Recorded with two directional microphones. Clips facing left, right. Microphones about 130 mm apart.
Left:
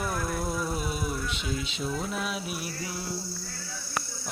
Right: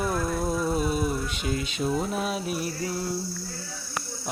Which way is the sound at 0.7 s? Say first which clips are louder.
Right 6 dB; 35° right (ahead or behind).